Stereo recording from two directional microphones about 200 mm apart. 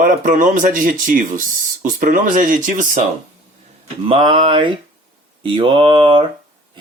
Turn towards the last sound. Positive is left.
turn(degrees=-25)  # may be behind; listen again after turning